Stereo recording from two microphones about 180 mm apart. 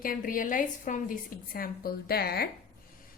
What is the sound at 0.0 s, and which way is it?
A woman's voice, 50° left (ahead or behind).